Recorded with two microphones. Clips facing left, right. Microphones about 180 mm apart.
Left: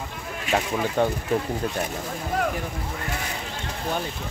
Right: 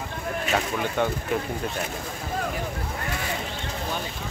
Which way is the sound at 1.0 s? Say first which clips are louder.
Left 3 dB; 30° left (ahead or behind).